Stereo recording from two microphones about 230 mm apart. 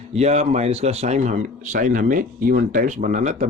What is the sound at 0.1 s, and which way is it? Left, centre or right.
A man's voice, right.